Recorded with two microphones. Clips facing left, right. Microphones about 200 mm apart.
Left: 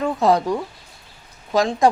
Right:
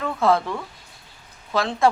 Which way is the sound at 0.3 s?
40° left (ahead or behind).